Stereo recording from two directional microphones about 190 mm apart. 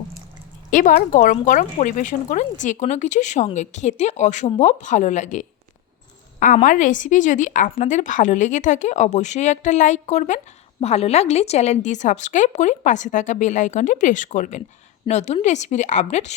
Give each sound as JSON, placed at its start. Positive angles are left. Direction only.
{"t": 0.7, "sound": "a woman's voice", "side_deg": 45}